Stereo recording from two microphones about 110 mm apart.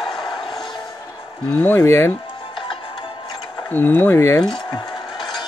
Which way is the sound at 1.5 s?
20° left (ahead or behind).